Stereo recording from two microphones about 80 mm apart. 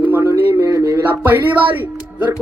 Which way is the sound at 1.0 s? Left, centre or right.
Right.